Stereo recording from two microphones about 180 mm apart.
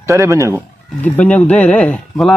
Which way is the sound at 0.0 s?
15° right (ahead or behind).